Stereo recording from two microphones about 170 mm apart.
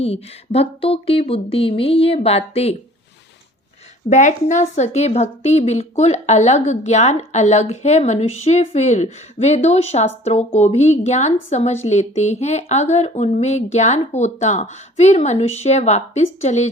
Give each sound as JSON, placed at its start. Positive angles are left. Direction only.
{"t": 0.0, "sound": "a woman's voice", "side_deg": 35}
{"t": 4.1, "sound": "a woman's voice", "side_deg": 45}